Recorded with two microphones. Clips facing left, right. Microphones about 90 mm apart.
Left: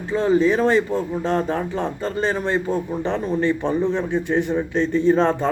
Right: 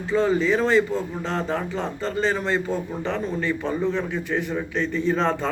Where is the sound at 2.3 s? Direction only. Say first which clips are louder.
Left 2 dB; 15° left (ahead or behind).